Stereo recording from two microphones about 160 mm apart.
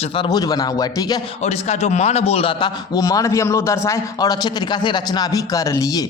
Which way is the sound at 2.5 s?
25° left (ahead or behind).